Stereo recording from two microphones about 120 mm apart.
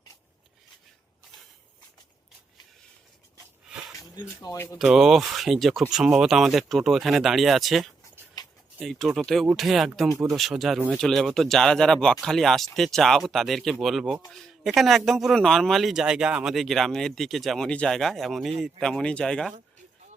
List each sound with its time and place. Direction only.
4.5 s speech: 20° left (ahead or behind)
4.8 s speech: 5° right (ahead or behind)